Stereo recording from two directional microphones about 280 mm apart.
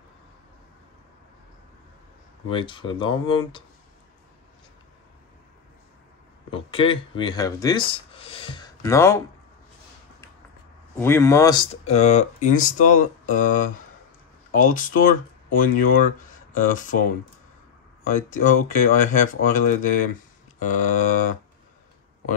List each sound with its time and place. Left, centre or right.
2.5 s speech: centre
6.5 s speech: centre
11.0 s speech: centre; by 17.0 s left
18.0 s speech: left